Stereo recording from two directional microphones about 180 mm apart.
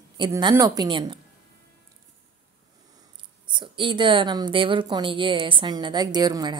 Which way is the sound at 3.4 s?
25° right (ahead or behind).